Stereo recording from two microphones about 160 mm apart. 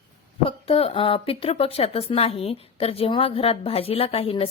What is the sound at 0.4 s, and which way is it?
Speech, 35° left (ahead or behind).